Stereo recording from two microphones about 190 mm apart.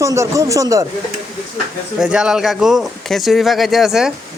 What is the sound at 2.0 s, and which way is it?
Speech, 5° right (ahead or behind).